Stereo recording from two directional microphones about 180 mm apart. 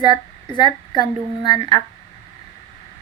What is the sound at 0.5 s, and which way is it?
Speech, 25° left (ahead or behind).